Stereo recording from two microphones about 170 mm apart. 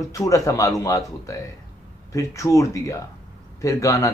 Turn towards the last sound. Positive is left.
turn(degrees=20)  # may be behind; listen again after turning